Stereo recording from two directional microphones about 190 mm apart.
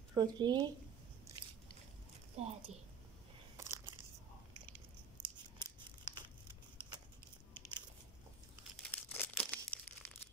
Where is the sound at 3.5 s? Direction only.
15° right (ahead or behind).